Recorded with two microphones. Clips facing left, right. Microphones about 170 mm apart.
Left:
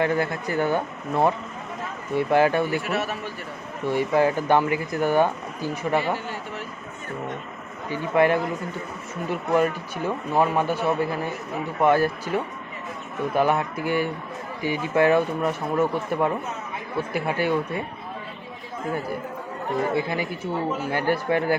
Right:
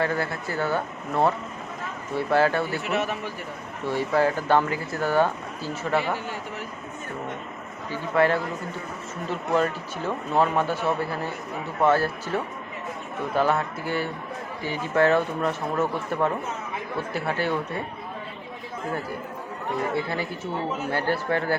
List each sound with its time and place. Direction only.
0.0 s speech: 20° left (ahead or behind)
2.8 s a man's voice: 20° right (ahead or behind)
3.8 s speech: 15° left (ahead or behind)
7.9 s speech: 15° left (ahead or behind)
19.9 s speech: 15° left (ahead or behind)